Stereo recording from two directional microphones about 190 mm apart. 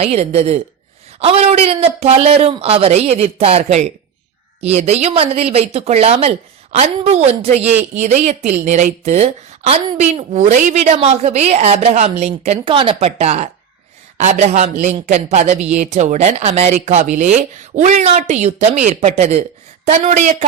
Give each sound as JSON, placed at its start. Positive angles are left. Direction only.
{"t": 0.0, "sound": "speech", "side_deg": -35}